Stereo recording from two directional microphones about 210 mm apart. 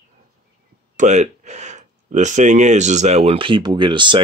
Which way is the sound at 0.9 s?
35° right (ahead or behind).